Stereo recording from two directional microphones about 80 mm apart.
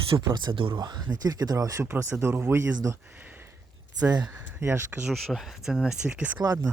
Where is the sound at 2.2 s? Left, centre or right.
Right.